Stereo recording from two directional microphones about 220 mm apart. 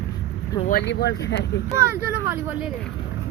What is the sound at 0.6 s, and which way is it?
Speech, 45° left (ahead or behind).